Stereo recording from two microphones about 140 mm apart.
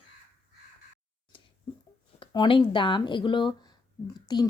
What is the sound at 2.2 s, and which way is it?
Speech, 35° left (ahead or behind).